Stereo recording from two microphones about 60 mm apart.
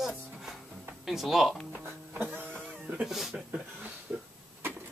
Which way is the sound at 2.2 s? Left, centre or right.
Right.